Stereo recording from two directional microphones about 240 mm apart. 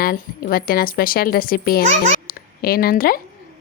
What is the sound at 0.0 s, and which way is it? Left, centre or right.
A woman's voice, left.